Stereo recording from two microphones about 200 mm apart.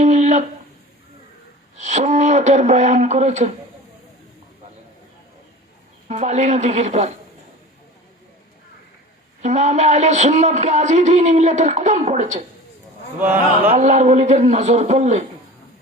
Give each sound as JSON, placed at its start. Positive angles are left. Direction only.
{"t": 0.0, "sound": "a sound", "side_deg": -35}
{"t": 1.8, "sound": "speech", "side_deg": -35}
{"t": 6.1, "sound": "a man's voice", "side_deg": -35}
{"t": 9.4, "sound": "a man's voice", "side_deg": -35}
{"t": 13.7, "sound": "a man's voice", "side_deg": -35}